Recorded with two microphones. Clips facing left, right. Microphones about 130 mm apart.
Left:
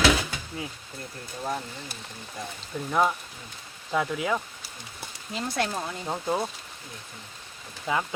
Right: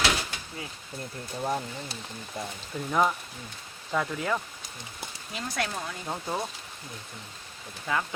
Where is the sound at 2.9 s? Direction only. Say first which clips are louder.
Left 1 dB; centre (ahead or behind).